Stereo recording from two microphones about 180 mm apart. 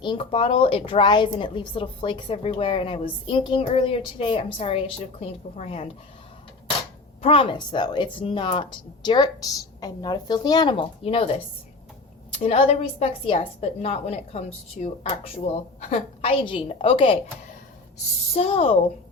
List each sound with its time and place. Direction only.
0.0 s a woman's voice: 30° left (ahead or behind)
7.2 s a woman's voice: 30° left (ahead or behind)
12.4 s a woman's voice: 35° left (ahead or behind)
18.3 s a woman's voice: 35° left (ahead or behind)